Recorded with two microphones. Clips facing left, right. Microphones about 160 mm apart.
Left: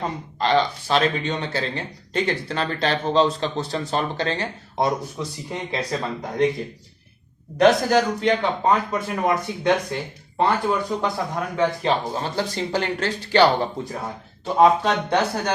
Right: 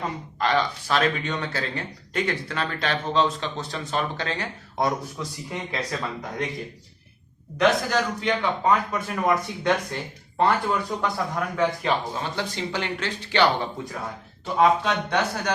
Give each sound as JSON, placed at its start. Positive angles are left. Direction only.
{"t": 0.0, "sound": "speech", "side_deg": 30}
{"t": 7.6, "sound": "speech", "side_deg": 35}